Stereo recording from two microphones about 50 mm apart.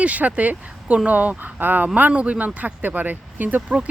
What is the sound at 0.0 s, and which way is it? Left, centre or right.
Speech, right.